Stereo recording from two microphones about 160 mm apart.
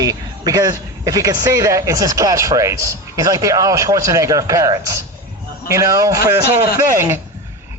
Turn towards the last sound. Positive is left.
turn(degrees=-15)  # may be behind; listen again after turning